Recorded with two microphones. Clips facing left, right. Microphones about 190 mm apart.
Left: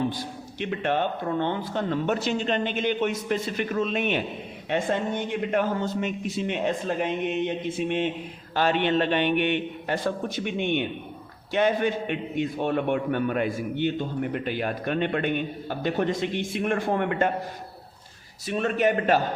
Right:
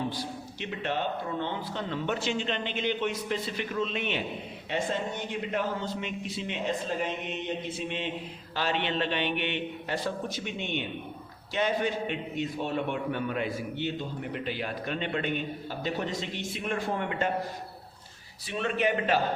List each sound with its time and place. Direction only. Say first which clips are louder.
0.1 s a man's voice: left 2 dB; 50° left (ahead or behind)
18.4 s a man's voice: left 5 dB; 45° left (ahead or behind)